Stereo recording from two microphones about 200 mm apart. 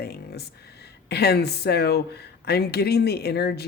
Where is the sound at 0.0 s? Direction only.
55° left (ahead or behind).